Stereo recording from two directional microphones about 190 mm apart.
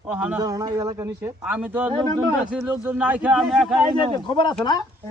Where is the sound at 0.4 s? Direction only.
20° right (ahead or behind); by 3.8 s centre (ahead or behind).